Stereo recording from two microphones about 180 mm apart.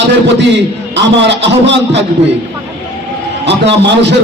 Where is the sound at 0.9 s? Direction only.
75° right (ahead or behind).